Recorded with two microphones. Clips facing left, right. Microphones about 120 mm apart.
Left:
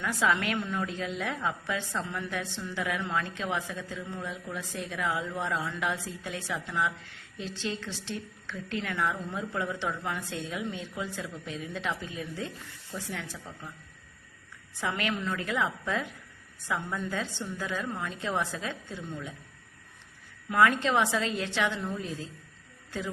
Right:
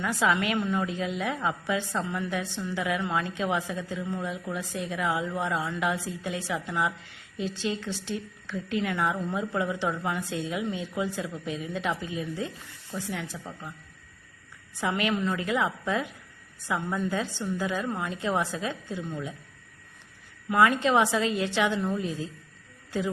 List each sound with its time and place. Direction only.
0.0 s a woman's voice: 10° right (ahead or behind)
14.8 s a woman's voice: 15° right (ahead or behind)
20.5 s a woman's voice: 10° right (ahead or behind)